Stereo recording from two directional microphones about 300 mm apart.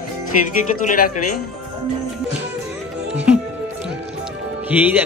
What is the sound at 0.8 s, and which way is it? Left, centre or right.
Speech, left.